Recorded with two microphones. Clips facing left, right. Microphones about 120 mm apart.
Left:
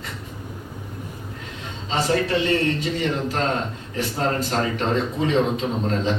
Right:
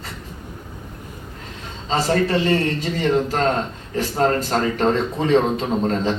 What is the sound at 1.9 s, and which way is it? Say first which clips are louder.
Speech: right 2 dB; 40° right (ahead or behind).